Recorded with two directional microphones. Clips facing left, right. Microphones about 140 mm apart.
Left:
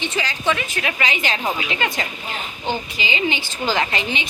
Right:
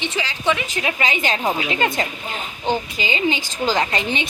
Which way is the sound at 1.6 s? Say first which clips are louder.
Right 3 dB; 40° right (ahead or behind).